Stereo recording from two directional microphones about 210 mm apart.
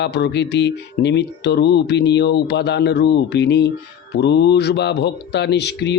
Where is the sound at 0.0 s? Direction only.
55° left (ahead or behind).